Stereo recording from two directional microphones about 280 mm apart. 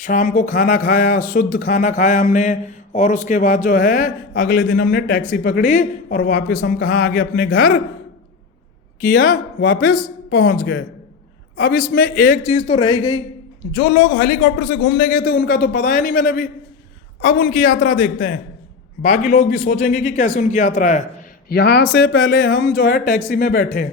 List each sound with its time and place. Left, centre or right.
0.0 s speech: left
9.0 s speech: left